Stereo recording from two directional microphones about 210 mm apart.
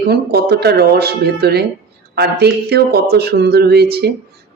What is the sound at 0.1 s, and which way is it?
A woman's voice, 50° right (ahead or behind).